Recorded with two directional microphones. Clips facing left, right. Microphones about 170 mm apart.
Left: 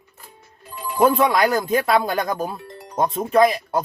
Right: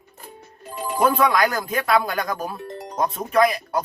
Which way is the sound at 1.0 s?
25° left (ahead or behind).